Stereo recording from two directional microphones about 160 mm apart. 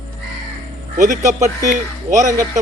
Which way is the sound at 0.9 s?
55° right (ahead or behind).